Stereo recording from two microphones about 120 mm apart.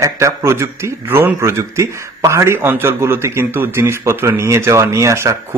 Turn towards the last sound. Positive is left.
turn(degrees=-25)  # may be behind; listen again after turning